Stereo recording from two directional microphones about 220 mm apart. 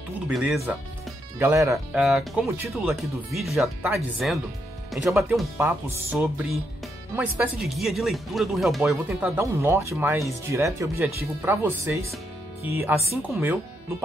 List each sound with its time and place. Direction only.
0.3 s speech: centre (ahead or behind)
1.4 s speech: 15° right (ahead or behind)
2.0 s speech: centre (ahead or behind)
2.4 s speech: 10° right (ahead or behind)
2.7 s speech: centre (ahead or behind)
9.4 s speech: 10° right (ahead or behind)